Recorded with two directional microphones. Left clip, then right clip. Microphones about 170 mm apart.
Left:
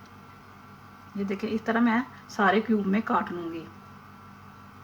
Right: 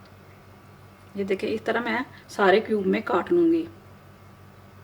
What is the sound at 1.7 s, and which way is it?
A woman's voice, 90° right.